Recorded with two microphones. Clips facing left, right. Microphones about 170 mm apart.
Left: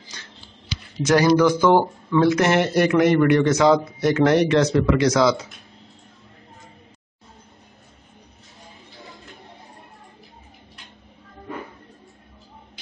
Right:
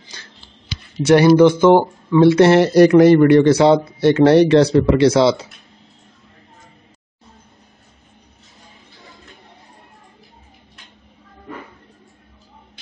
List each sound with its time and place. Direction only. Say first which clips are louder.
0.9 s speech: right 6 dB; 25° right (ahead or behind)
2.2 s a man's voice: right 9 dB; 30° right (ahead or behind)